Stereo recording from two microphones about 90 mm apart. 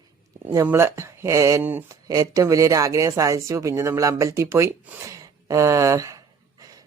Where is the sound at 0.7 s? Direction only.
30° right (ahead or behind).